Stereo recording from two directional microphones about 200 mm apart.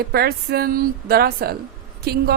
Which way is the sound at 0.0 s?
50° right (ahead or behind).